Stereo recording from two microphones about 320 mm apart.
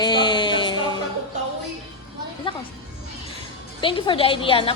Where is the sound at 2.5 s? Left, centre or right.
Centre.